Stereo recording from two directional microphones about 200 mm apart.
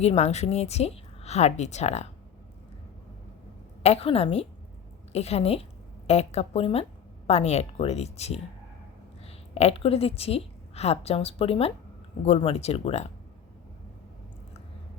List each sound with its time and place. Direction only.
0.0 s speech: 30° left (ahead or behind)
3.8 s a woman's voice: 30° left (ahead or behind)